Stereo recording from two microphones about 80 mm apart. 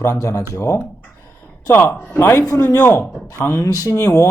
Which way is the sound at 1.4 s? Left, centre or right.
Left.